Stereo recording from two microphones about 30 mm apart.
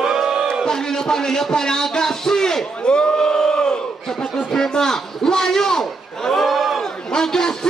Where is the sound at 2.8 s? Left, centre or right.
Left.